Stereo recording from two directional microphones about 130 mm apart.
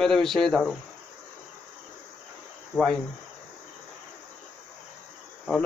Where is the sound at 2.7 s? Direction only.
5° left (ahead or behind).